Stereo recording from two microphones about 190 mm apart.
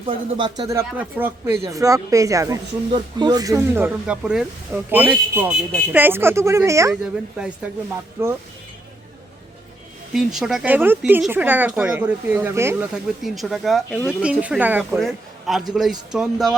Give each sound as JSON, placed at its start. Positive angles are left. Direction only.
{"t": 0.0, "sound": "speech", "side_deg": -25}
{"t": 8.2, "sound": "speech", "side_deg": -15}
{"t": 10.1, "sound": "speech", "side_deg": 0}